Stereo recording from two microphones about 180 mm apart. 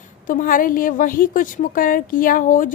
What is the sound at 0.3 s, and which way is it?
A woman's voice, 50° left (ahead or behind).